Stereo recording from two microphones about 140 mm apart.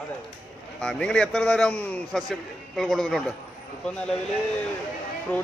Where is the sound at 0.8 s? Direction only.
5° left (ahead or behind).